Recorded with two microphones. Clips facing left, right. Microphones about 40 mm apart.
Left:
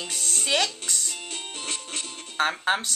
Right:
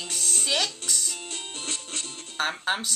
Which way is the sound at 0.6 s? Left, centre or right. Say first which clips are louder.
Even; left.